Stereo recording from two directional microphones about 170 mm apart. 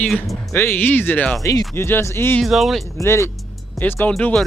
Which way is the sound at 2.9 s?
15° left (ahead or behind).